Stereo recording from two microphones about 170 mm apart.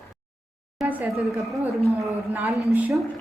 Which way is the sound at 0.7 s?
5° right (ahead or behind).